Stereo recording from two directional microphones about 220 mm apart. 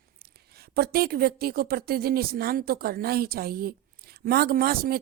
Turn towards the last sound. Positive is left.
turn(degrees=-45)  # may be behind; listen again after turning